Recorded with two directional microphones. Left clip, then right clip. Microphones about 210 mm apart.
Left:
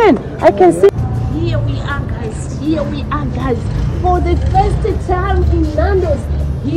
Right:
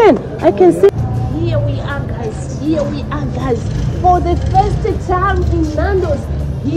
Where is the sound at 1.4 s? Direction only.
40° right (ahead or behind).